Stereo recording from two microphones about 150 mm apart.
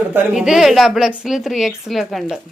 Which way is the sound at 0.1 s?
10° right (ahead or behind).